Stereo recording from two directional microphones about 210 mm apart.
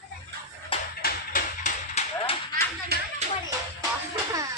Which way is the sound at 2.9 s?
50° right (ahead or behind).